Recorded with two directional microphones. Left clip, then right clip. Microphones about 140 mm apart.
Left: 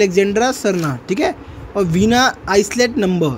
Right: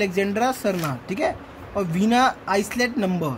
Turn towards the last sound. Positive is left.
turn(degrees=35)  # may be behind; listen again after turning